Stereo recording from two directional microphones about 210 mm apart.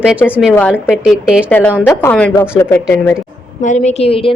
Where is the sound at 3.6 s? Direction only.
35° left (ahead or behind).